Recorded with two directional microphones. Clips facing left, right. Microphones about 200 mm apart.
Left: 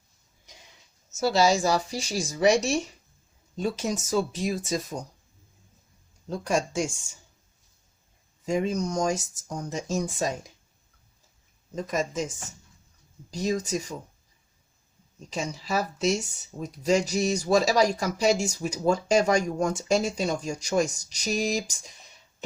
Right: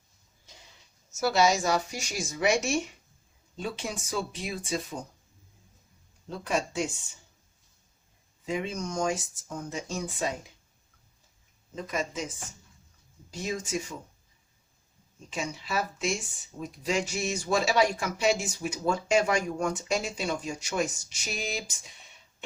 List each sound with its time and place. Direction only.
1.1 s speech: 30° left (ahead or behind)
6.4 s speech: 45° left (ahead or behind)
8.4 s speech: 40° left (ahead or behind)
11.7 s speech: 45° left (ahead or behind)
13.3 s speech: 40° left (ahead or behind)
15.3 s speech: 40° left (ahead or behind)